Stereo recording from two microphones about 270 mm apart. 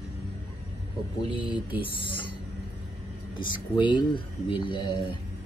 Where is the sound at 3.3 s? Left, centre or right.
Centre.